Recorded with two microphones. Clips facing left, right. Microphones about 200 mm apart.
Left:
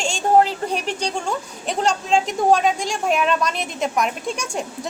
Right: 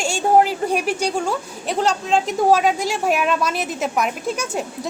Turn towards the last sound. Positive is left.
turn(degrees=-5)  # may be behind; listen again after turning